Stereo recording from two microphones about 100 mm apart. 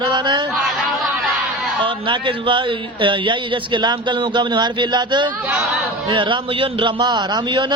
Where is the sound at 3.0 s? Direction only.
55° right (ahead or behind).